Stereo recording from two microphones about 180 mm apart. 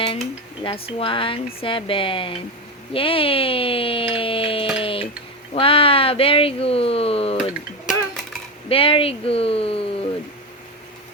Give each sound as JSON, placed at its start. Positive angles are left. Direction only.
{"t": 0.6, "sound": "speech", "side_deg": 30}
{"t": 4.8, "sound": "tick-tock", "side_deg": 30}
{"t": 5.5, "sound": "speech", "side_deg": 30}
{"t": 7.9, "sound": "a sound", "side_deg": 0}
{"t": 8.7, "sound": "speech", "side_deg": 30}